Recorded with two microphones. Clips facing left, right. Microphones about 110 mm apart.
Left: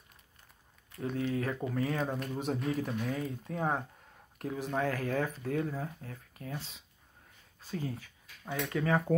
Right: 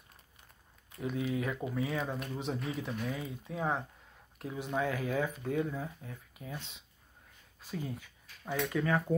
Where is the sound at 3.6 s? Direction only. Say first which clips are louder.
Left 1 dB; 35° left (ahead or behind).